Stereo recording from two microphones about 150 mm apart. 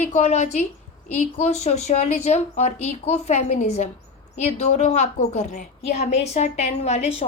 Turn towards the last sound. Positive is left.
turn(degrees=45)  # may be behind; listen again after turning